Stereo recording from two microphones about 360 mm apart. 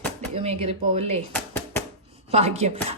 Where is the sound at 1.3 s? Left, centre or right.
Centre.